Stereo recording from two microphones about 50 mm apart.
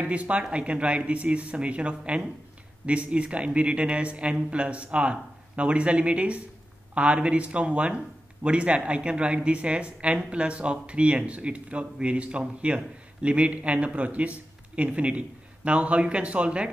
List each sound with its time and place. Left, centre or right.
0.0 s speech: right